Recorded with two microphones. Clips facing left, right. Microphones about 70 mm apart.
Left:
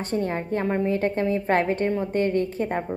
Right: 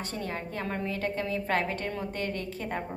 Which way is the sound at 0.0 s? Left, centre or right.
Left.